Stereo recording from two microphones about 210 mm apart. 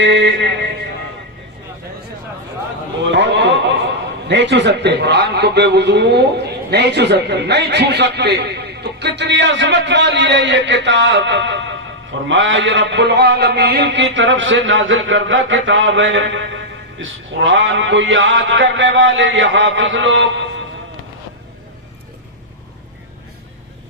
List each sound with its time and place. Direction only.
0.0 s mantra: 60° right (ahead or behind)
3.0 s a sound: 60° right (ahead or behind)
4.3 s mantra: 55° right (ahead or behind)